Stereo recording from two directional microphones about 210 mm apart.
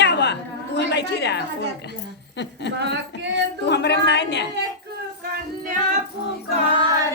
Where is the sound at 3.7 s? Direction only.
55° left (ahead or behind).